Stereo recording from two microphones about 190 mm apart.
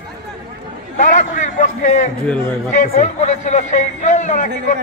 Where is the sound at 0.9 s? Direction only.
40° left (ahead or behind).